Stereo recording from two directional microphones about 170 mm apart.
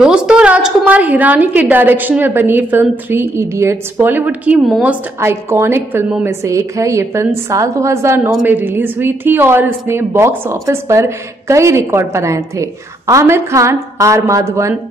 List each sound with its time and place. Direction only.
0.0 s a woman's voice: 5° right (ahead or behind)
5.2 s a woman's voice: 15° right (ahead or behind)